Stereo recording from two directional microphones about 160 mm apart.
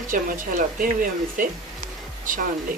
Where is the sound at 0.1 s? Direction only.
60° right (ahead or behind).